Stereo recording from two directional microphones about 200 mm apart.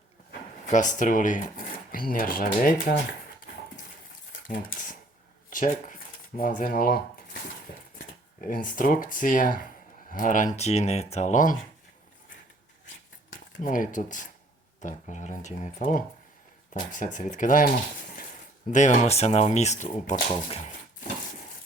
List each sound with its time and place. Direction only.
0.7 s speech: 40° left (ahead or behind)
4.3 s a sound: 45° left (ahead or behind)
5.5 s speech: 40° left (ahead or behind)
13.6 s speech: 40° left (ahead or behind)
18.7 s speech: 40° left (ahead or behind)